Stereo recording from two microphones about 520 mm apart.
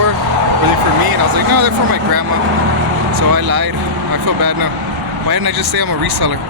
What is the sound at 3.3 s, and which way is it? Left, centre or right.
Speech, right.